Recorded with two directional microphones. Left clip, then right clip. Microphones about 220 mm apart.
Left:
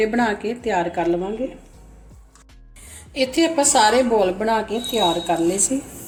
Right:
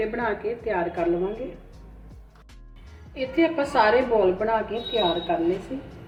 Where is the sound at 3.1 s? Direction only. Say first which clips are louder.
Left 4 dB; 60° left (ahead or behind).